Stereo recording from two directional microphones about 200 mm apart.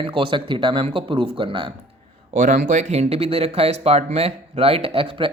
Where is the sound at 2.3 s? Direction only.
40° right (ahead or behind).